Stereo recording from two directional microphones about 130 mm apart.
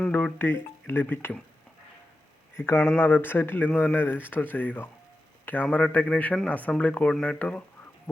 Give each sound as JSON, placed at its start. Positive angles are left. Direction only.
{"t": 0.0, "sound": "speech", "side_deg": 10}
{"t": 2.6, "sound": "speech", "side_deg": 15}
{"t": 8.1, "sound": "crow", "side_deg": 5}